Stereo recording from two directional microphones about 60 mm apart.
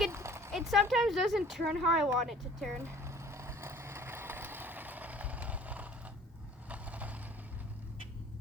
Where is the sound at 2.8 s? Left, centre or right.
Right.